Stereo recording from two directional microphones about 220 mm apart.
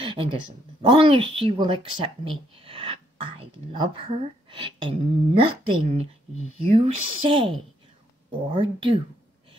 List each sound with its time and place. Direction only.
0.0 s a sound: 25° right (ahead or behind)
0.8 s speech: 25° right (ahead or behind)
8.5 s speech: 25° right (ahead or behind)